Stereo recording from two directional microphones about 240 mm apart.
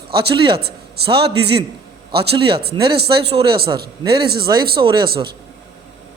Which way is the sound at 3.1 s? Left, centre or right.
Right.